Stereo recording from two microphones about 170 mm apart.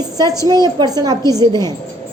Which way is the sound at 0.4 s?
25° right (ahead or behind).